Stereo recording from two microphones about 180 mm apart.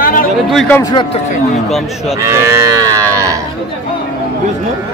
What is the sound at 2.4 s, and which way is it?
Moo, 20° right (ahead or behind).